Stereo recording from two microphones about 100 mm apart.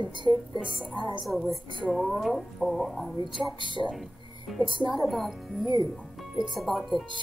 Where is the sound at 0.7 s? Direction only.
Centre (ahead or behind).